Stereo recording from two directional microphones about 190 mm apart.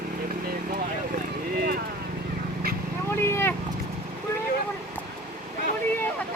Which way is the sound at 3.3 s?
10° left (ahead or behind).